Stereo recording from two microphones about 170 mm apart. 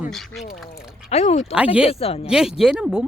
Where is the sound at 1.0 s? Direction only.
40° left (ahead or behind).